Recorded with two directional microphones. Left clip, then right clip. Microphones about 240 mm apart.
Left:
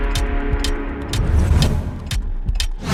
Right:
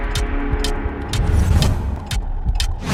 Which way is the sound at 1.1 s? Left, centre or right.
Centre.